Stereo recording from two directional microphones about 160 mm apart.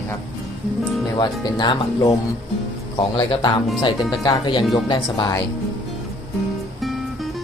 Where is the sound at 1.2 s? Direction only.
25° left (ahead or behind).